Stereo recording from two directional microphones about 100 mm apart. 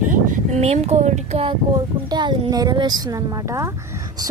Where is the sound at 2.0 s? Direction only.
50° right (ahead or behind).